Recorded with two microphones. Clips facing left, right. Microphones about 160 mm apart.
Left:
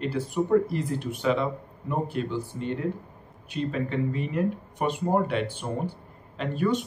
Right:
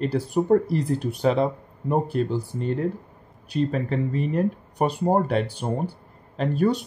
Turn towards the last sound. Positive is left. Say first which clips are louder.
# right 4 dB
turn(degrees=-40)  # may be behind; listen again after turning